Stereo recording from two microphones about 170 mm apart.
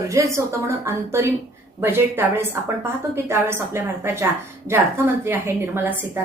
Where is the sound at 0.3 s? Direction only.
15° right (ahead or behind).